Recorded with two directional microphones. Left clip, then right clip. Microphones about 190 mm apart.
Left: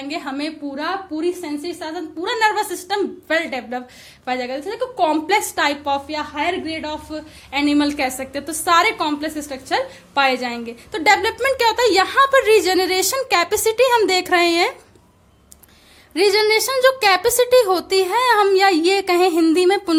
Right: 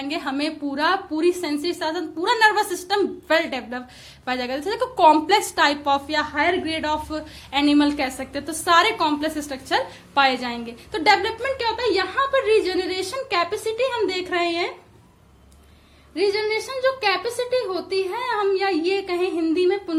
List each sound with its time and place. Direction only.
0.0 s a woman's voice: 5° left (ahead or behind)
0.7 s a woman's voice: 5° right (ahead or behind)
7.5 s a woman's voice: 15° left (ahead or behind); by 14.7 s 35° left (ahead or behind)
16.1 s a woman's voice: 35° left (ahead or behind)